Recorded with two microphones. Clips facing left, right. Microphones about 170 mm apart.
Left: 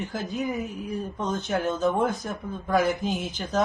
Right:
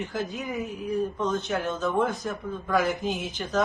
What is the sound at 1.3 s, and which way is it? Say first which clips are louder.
Speech: left 1 dB; 40° left (ahead or behind).